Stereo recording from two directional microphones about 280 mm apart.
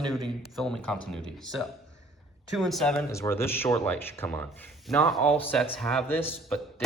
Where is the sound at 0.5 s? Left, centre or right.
Centre.